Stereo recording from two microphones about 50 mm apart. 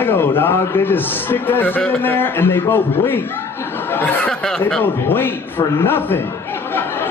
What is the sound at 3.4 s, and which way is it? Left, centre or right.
Laughter, left.